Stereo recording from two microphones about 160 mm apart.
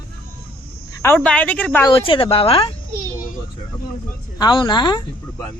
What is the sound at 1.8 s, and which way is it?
Speech, 35° left (ahead or behind).